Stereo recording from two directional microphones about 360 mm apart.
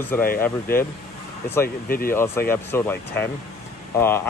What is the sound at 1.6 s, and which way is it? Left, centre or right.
Speech, left.